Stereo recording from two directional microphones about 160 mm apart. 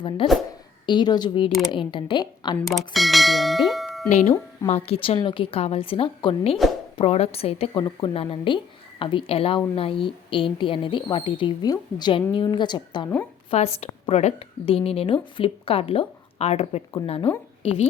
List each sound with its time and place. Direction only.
0.2 s a woman's voice: 30° left (ahead or behind)
2.6 s bell: centre (ahead or behind)
4.1 s a woman's voice: 45° left (ahead or behind); by 13.1 s 30° left (ahead or behind)
13.5 s speech: 40° left (ahead or behind)